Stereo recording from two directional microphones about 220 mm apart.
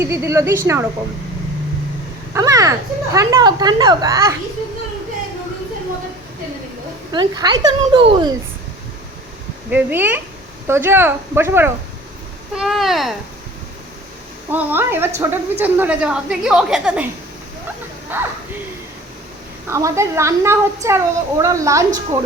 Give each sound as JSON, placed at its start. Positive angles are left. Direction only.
{"t": 0.0, "sound": "a woman's voice", "side_deg": -10}
{"t": 2.3, "sound": "a woman's voice", "side_deg": -15}
{"t": 7.1, "sound": "speech", "side_deg": -20}
{"t": 9.6, "sound": "a woman's voice", "side_deg": -10}
{"t": 14.5, "sound": "a woman's voice", "side_deg": -10}
{"t": 18.1, "sound": "a woman's voice", "side_deg": -10}
{"t": 19.6, "sound": "a woman's voice", "side_deg": -15}